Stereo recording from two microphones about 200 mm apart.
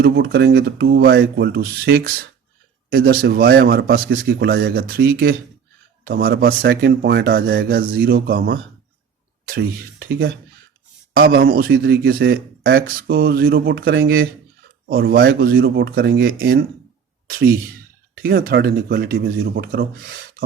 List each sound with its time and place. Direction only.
0.0 s a man's voice: 50° right (ahead or behind)
11.1 s a man's voice: 50° right (ahead or behind)
15.2 s a man's voice: 70° right (ahead or behind)
15.4 s a man's voice: 50° right (ahead or behind)
18.2 s a man's voice: 50° right (ahead or behind)